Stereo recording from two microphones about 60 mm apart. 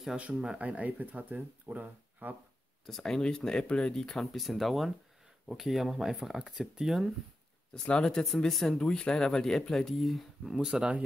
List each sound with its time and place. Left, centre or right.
0.1 s speech: centre
2.9 s speech: centre
7.7 s speech: centre
10.5 s speech: centre